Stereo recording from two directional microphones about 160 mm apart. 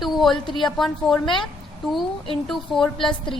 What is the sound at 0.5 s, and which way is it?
Speech, centre (ahead or behind).